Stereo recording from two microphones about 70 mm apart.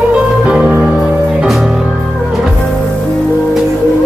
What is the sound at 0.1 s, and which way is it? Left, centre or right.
Music, centre.